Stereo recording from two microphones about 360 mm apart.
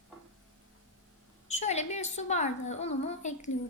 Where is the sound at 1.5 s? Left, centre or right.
Centre.